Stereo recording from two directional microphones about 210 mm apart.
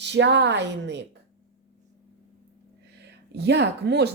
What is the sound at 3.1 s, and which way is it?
Speech, 55° right (ahead or behind).